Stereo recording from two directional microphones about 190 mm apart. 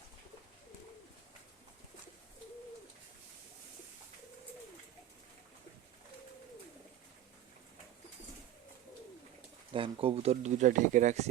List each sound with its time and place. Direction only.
9.7 s speech: 25° right (ahead or behind)